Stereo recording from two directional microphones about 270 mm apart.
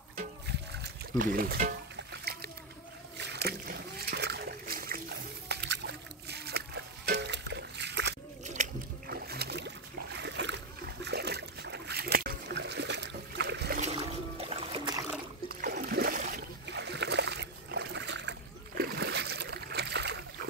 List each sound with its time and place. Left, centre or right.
0.2 s music: right
2.3 s splash: right
8.5 s boat: right
15.4 s rowboat: right
18.8 s splash: right